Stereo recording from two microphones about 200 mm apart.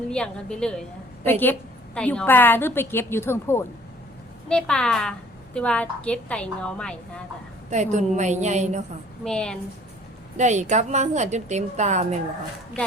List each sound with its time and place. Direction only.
0.1 s a woman's voice: 5° left (ahead or behind)
7.7 s a woman's voice: 35° right (ahead or behind)
9.2 s a woman's voice: 5° left (ahead or behind)
10.3 s a woman's voice: 35° right (ahead or behind)